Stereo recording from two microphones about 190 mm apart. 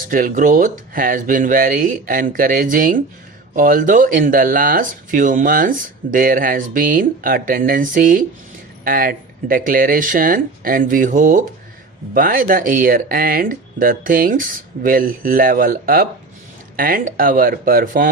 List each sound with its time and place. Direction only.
0.1 s speech: 45° right (ahead or behind)